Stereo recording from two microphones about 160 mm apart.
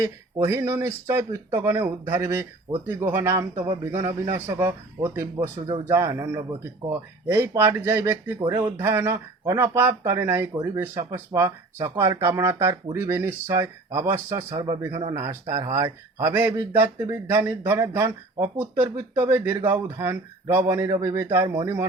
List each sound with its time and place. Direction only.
0.4 s speech: 15° right (ahead or behind)